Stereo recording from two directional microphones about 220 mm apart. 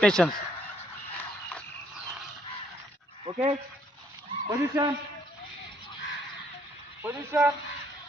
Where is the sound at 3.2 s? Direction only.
25° right (ahead or behind).